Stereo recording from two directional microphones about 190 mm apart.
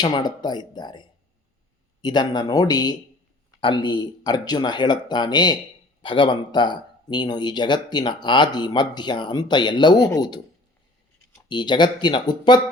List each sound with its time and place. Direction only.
0.0 s speech: 20° left (ahead or behind)